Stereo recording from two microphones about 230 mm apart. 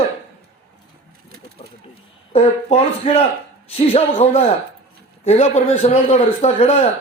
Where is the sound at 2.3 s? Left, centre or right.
Left.